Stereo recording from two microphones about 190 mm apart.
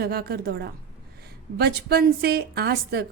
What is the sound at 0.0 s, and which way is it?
A woman's voice, 55° right (ahead or behind).